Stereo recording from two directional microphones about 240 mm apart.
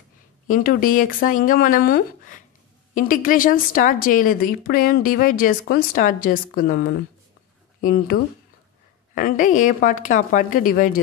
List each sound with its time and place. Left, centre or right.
0.5 s a woman's voice: left